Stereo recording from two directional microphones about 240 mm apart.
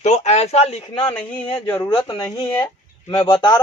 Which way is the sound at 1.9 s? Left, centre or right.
Centre.